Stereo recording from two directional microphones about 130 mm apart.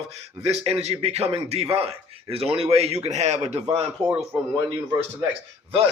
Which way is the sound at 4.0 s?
20° right (ahead or behind).